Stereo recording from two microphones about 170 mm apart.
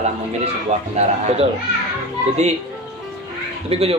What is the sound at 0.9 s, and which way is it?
Speech, 40° right (ahead or behind).